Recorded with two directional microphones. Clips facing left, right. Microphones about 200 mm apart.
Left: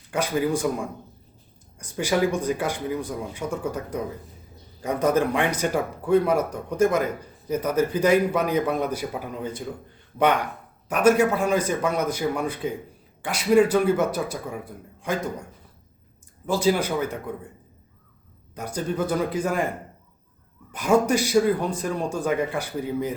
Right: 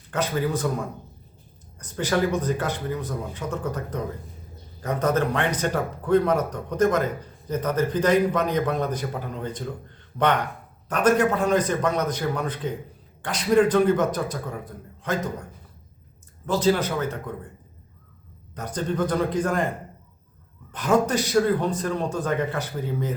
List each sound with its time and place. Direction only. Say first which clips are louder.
0.1 s a man's voice: left 2 dB; 10° left (ahead or behind)
1.8 s a man's voice: left 1 dB; 10° left (ahead or behind)
16.5 s a man's voice: even; 10° left (ahead or behind)
18.5 s a man's voice: even; 10° left (ahead or behind)
20.7 s a man's voice: left 1 dB; 10° left (ahead or behind)